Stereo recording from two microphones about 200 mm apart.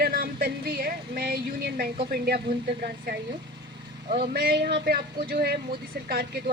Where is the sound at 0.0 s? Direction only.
45° right (ahead or behind).